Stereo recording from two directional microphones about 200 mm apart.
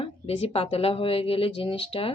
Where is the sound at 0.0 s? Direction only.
30° left (ahead or behind).